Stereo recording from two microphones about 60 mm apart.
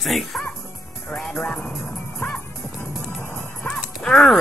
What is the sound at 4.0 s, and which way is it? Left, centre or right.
Speech, centre.